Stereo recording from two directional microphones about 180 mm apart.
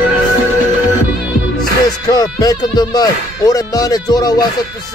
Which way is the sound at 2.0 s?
20° left (ahead or behind).